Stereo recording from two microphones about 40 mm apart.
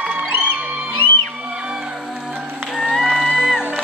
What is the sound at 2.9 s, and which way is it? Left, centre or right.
Music, centre.